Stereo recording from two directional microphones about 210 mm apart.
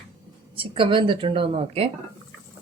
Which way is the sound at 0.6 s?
25° right (ahead or behind).